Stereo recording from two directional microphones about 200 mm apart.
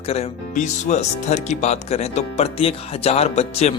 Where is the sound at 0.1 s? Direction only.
35° left (ahead or behind).